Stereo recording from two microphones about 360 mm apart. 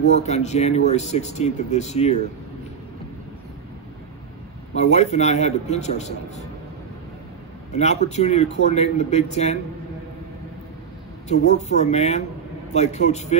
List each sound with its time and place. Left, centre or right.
0.0 s speech: centre
4.7 s speech: centre
7.7 s speech: centre
11.2 s speech: centre